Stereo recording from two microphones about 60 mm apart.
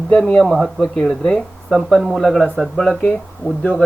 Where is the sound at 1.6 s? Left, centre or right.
Centre.